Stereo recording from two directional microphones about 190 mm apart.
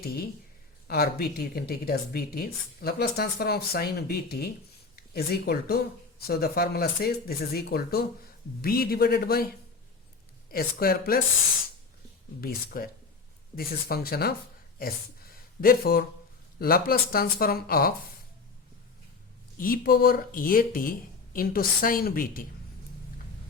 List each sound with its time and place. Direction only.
0.9 s speech: 55° left (ahead or behind)
12.4 s speech: 50° left (ahead or behind)
15.6 s speech: 50° left (ahead or behind)
19.5 s speech: 50° left (ahead or behind)